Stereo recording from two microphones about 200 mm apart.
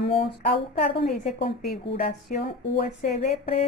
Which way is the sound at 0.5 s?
60° left (ahead or behind).